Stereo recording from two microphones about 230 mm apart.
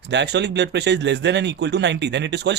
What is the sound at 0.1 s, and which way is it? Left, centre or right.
Speech, right.